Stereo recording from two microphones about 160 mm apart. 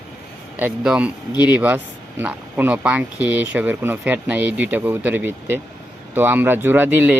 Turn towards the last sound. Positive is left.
turn(degrees=-10)  # may be behind; listen again after turning